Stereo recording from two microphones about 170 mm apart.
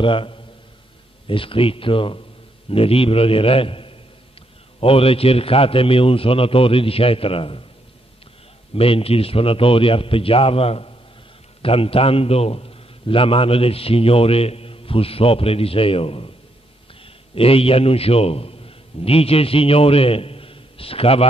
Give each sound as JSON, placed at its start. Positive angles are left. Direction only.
{"t": 0.0, "sound": "a man's voice", "side_deg": 30}
{"t": 8.7, "sound": "a man's voice", "side_deg": 35}